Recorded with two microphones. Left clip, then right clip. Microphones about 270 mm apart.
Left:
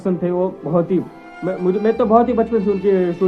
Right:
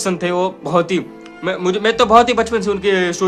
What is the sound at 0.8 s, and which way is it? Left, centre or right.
A man's voice, centre.